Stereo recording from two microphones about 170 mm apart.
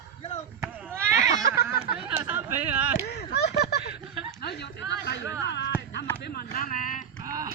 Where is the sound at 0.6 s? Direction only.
15° right (ahead or behind).